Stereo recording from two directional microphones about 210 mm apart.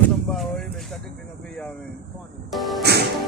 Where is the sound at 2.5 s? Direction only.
Centre (ahead or behind).